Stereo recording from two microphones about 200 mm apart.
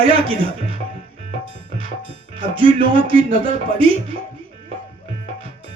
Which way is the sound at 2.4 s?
25° right (ahead or behind).